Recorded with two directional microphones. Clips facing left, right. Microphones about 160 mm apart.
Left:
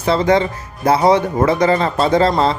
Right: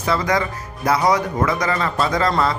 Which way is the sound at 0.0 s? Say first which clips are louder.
Left 6 dB; 30° left (ahead or behind).